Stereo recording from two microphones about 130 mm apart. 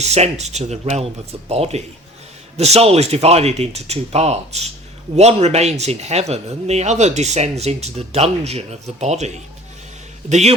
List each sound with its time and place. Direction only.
0.0 s speech: 55° right (ahead or behind)